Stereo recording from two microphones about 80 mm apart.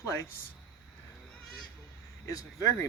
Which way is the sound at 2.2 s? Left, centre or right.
Left.